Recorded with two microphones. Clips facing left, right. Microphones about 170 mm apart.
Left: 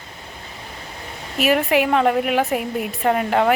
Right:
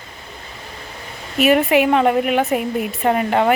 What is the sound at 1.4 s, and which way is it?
Speech, centre (ahead or behind).